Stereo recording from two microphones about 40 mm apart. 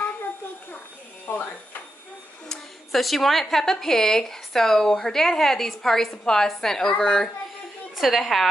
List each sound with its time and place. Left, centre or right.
1.2 s speech: left
2.5 s speech: centre
8.0 s a woman's voice: centre